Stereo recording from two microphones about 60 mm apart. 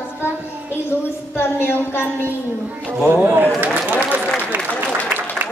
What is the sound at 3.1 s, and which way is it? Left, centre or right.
Speech, right.